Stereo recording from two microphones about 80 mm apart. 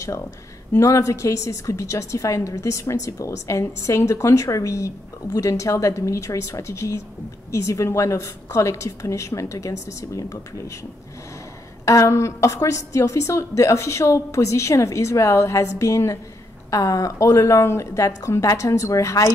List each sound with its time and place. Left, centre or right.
0.7 s a woman's voice: left
11.8 s a woman's voice: left